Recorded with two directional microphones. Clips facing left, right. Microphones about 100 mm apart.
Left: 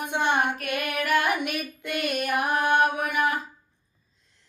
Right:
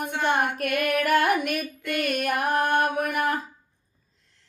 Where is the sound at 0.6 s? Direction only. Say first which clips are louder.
Right 5 dB; 45° right (ahead or behind).